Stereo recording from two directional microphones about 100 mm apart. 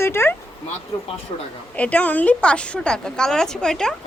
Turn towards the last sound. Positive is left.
turn(degrees=5)  # may be behind; listen again after turning